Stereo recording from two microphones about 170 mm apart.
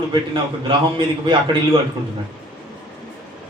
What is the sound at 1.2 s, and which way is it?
Speech, 30° right (ahead or behind).